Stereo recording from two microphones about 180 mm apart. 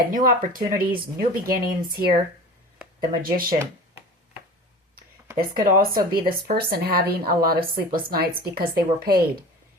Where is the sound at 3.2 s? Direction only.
55° right (ahead or behind).